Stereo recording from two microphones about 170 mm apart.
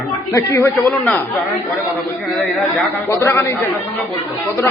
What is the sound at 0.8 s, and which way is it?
Speech, centre (ahead or behind).